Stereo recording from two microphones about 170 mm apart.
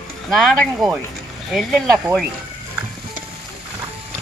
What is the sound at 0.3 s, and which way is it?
Speech, centre (ahead or behind).